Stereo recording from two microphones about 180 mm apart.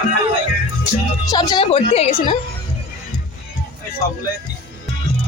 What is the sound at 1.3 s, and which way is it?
A woman's voice, 25° left (ahead or behind).